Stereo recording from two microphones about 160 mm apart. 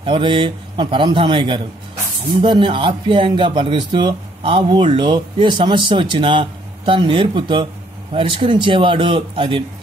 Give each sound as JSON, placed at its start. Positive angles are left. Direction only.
{"t": 0.0, "sound": "speech", "side_deg": -30}